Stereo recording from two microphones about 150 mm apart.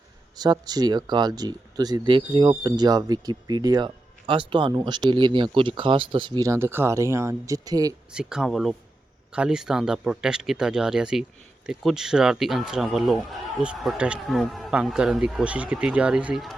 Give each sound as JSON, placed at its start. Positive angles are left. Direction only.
{"t": 0.3, "sound": "speech", "side_deg": -25}
{"t": 8.1, "sound": "speech", "side_deg": -5}